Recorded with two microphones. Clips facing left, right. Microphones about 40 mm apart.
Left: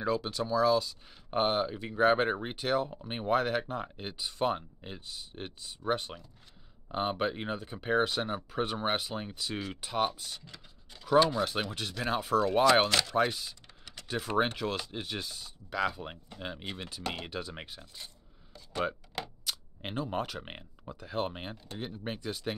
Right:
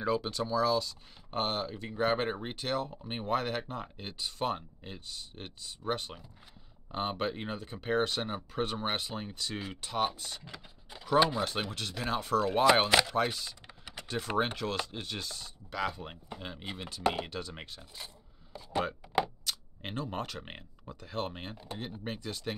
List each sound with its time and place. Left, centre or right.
0.0 s speech: centre
10.4 s a sound: centre
11.1 s speech: centre
12.0 s speech: centre
12.8 s speech: centre
13.1 s speech: centre
17.0 s speech: centre
17.3 s speech: centre
17.9 s scrape: centre
19.4 s speech: centre